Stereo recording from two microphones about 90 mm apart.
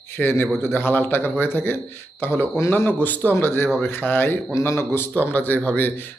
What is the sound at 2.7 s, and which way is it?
Speech, 20° left (ahead or behind).